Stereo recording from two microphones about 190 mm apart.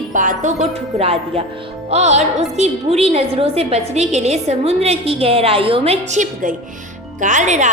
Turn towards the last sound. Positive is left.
turn(degrees=-40)  # may be behind; listen again after turning